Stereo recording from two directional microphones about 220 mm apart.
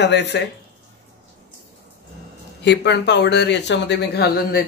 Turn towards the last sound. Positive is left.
turn(degrees=50)  # may be behind; listen again after turning